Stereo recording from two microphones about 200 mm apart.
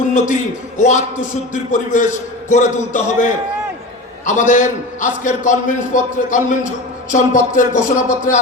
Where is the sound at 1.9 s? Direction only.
40° left (ahead or behind).